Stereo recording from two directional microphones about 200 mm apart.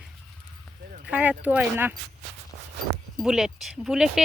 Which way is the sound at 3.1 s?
Centre (ahead or behind).